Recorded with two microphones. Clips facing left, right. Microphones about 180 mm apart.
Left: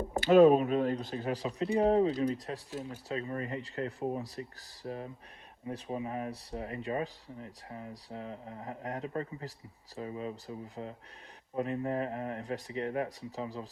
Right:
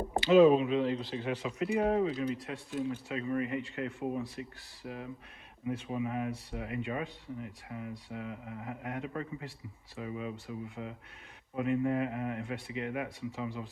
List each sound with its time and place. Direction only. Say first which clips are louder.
0.2 s speech: left 1 dB; 50° left (ahead or behind)